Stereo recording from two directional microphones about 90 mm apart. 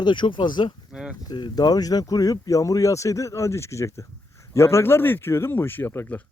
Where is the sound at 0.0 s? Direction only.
60° left (ahead or behind).